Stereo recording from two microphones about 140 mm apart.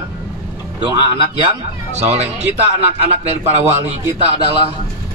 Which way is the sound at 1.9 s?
50° right (ahead or behind).